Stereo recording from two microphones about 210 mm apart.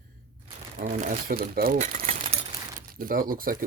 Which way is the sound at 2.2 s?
25° right (ahead or behind).